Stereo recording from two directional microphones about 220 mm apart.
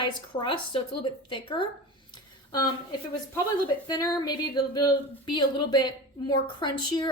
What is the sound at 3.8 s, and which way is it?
Music, 20° left (ahead or behind).